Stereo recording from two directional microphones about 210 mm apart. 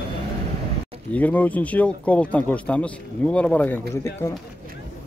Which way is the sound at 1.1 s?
5° left (ahead or behind).